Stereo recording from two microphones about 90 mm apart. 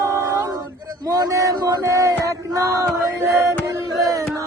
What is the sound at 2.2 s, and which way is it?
Music, 40° right (ahead or behind).